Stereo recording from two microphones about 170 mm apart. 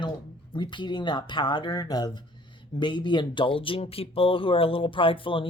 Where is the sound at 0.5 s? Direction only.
25° left (ahead or behind).